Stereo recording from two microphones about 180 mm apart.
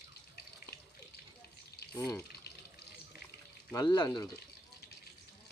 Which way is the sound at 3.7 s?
20° left (ahead or behind).